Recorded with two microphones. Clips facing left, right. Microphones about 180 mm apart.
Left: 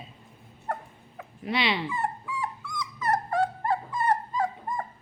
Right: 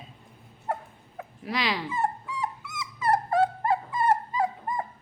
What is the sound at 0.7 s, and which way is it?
Dog, 5° right (ahead or behind).